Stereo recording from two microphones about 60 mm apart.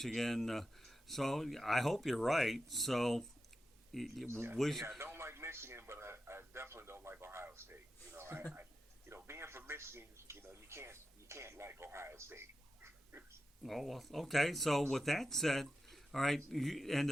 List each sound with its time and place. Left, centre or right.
0.0 s speech: centre
4.3 s speech: right
4.5 s speech: centre
5.1 s radio: right
9.2 s a sound: right
13.6 s speech: centre